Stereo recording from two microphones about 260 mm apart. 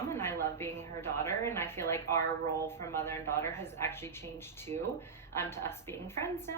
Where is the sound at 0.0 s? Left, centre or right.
Centre.